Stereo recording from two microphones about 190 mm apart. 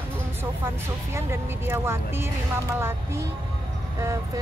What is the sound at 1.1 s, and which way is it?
Speech, 15° right (ahead or behind).